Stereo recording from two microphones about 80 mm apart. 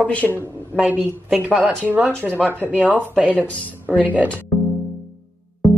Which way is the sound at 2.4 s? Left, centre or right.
Centre.